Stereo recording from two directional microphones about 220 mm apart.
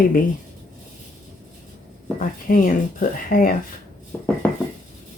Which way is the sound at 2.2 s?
40° left (ahead or behind).